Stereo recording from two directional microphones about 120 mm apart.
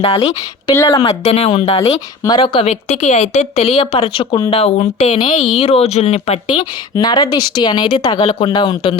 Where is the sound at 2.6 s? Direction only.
65° left (ahead or behind).